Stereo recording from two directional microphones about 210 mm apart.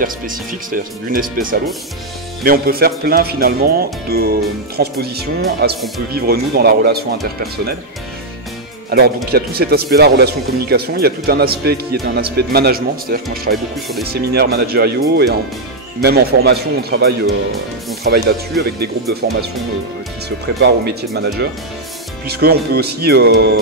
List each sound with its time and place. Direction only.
0.0 s speech: 40° right (ahead or behind)
8.9 s speech: 45° right (ahead or behind)